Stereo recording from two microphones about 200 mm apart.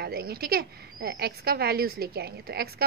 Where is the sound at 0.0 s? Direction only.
50° right (ahead or behind).